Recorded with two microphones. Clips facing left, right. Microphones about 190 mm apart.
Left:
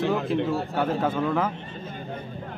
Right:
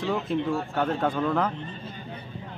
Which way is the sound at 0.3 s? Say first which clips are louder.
Left 1 dB; centre (ahead or behind).